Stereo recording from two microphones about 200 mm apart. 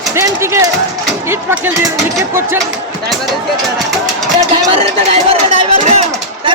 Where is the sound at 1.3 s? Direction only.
10° right (ahead or behind).